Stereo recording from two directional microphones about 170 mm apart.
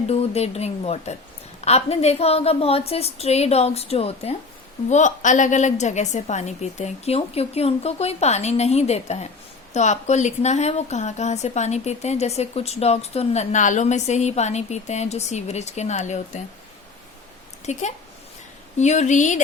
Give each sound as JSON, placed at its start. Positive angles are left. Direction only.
{"t": 0.1, "sound": "speech", "side_deg": 40}
{"t": 17.7, "sound": "speech", "side_deg": 45}